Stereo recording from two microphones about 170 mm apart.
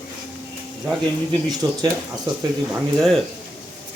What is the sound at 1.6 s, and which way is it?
Speech, 25° right (ahead or behind).